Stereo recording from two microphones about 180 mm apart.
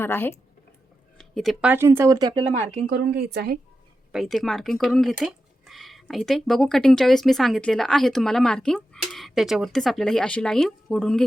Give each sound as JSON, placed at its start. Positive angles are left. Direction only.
{"t": 0.0, "sound": "speech", "side_deg": 10}
{"t": 1.2, "sound": "speech", "side_deg": 0}
{"t": 1.7, "sound": "speech", "side_deg": -15}
{"t": 2.9, "sound": "speech", "side_deg": -60}
{"t": 4.1, "sound": "speech", "side_deg": 0}